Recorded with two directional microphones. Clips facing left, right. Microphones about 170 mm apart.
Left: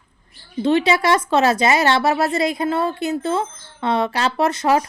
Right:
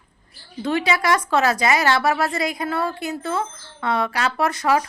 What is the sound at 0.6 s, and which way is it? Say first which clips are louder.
A woman's voice: left 5 dB; 25° left (ahead or behind).